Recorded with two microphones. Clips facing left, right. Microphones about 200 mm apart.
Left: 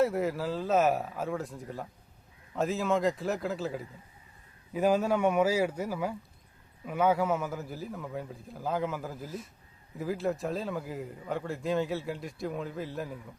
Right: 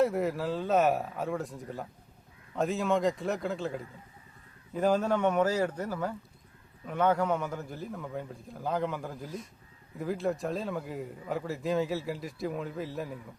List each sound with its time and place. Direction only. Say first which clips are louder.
0.0 s a man's voice: even; centre (ahead or behind)